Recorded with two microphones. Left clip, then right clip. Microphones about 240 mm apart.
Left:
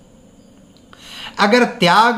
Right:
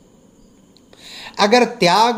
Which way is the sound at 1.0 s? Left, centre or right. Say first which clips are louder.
Left 2 dB; left.